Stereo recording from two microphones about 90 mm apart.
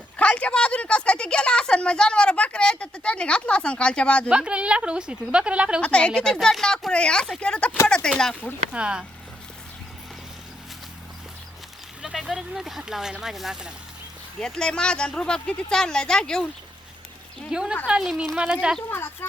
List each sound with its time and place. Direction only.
0.2 s a woman's voice: 15° left (ahead or behind)
4.3 s a woman's voice: 10° right (ahead or behind)
5.8 s a woman's voice: 10° left (ahead or behind)
8.7 s a woman's voice: 10° right (ahead or behind)
12.0 s speech: 5° right (ahead or behind)
14.3 s a woman's voice: 5° left (ahead or behind)
17.5 s a woman's voice: 10° right (ahead or behind)
18.9 s speech: 25° left (ahead or behind)